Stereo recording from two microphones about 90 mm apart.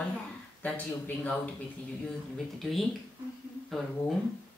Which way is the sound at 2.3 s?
Centre (ahead or behind).